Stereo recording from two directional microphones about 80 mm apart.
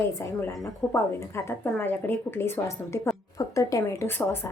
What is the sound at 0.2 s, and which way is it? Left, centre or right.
A woman's voice, left.